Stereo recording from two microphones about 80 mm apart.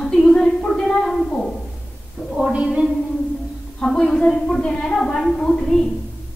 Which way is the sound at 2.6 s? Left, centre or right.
Centre.